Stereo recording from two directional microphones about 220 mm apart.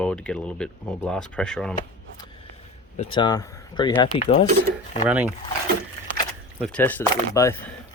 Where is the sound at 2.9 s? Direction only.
25° left (ahead or behind).